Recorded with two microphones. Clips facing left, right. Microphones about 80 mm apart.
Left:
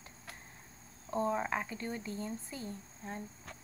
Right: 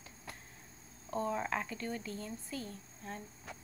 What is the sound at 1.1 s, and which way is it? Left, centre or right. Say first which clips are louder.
Speech: left 2 dB; left.